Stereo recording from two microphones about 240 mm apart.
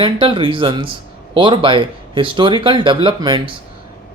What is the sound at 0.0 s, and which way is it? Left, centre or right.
Speech, right.